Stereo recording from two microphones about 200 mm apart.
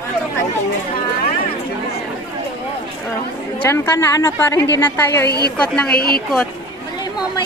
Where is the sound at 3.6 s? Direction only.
10° left (ahead or behind).